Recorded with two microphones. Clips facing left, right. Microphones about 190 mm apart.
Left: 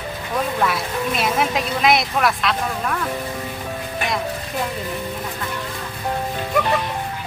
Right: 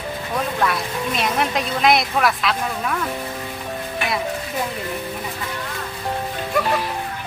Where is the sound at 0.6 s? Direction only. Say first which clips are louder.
Left 1 dB; centre (ahead or behind).